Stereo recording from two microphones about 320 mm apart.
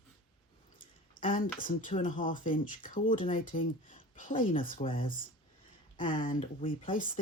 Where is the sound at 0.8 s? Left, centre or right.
Left.